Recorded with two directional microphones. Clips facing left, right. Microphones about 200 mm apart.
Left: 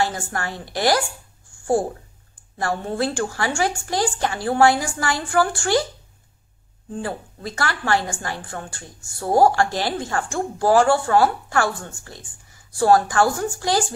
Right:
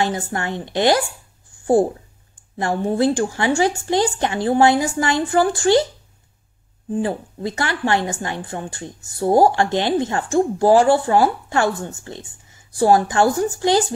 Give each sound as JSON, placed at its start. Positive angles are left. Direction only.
{"t": 0.0, "sound": "a woman's voice", "side_deg": -20}
{"t": 1.5, "sound": "a sound", "side_deg": -20}
{"t": 2.5, "sound": "a woman's voice", "side_deg": -20}
{"t": 6.9, "sound": "a woman's voice", "side_deg": -20}